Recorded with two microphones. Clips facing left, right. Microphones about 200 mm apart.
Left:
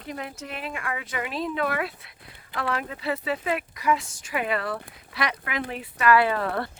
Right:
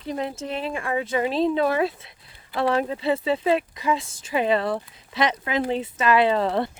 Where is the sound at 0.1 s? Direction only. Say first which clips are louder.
Right 7 dB; 30° right (ahead or behind).